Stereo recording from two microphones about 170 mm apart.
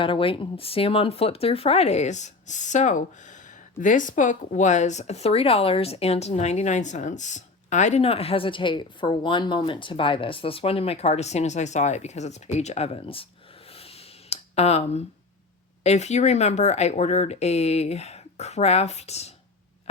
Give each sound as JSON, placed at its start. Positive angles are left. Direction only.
{"t": 0.0, "sound": "speech", "side_deg": 30}
{"t": 13.7, "sound": "a sound", "side_deg": 35}
{"t": 15.8, "sound": "speech", "side_deg": 40}